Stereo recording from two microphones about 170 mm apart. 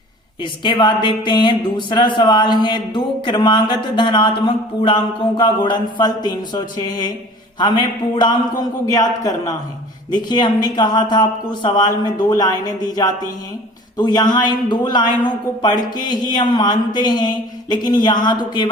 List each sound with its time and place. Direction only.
0.4 s speech: 30° left (ahead or behind)